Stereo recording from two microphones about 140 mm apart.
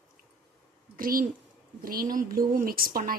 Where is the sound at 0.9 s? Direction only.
90° right.